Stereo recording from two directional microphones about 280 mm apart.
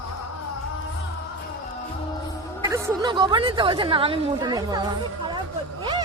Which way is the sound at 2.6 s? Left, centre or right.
Centre.